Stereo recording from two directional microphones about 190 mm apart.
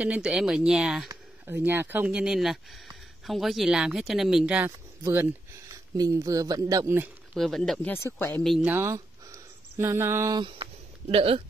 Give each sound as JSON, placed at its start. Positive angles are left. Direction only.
{"t": 0.0, "sound": "speech", "side_deg": -5}
{"t": 7.3, "sound": "speech", "side_deg": 0}
{"t": 8.5, "sound": "speech", "side_deg": -5}